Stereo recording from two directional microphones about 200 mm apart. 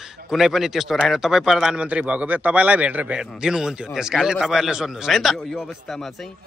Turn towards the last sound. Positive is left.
turn(degrees=0)  # may be behind; listen again after turning